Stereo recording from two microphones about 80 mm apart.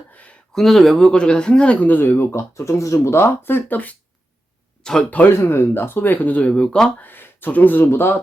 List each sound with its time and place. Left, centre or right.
0.1 s a sound: centre
0.5 s speech: centre; by 3.9 s left
4.8 s speech: centre
5.1 s speech: left; by 6.9 s centre
7.0 s speech: left